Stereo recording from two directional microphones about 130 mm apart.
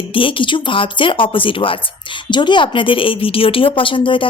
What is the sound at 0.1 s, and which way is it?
A woman's voice, 40° left (ahead or behind).